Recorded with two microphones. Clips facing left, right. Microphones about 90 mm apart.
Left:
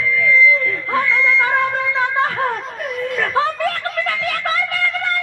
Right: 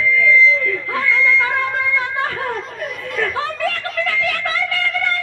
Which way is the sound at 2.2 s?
35° left (ahead or behind).